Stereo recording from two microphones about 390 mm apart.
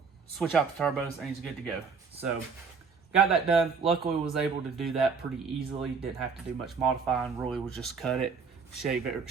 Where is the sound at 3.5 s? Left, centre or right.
Centre.